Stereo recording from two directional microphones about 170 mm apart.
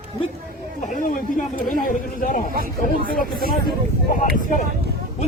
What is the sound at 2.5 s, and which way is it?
Speech, 60° right (ahead or behind).